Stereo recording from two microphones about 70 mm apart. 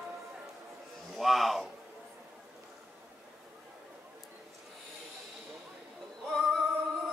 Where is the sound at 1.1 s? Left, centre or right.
Centre.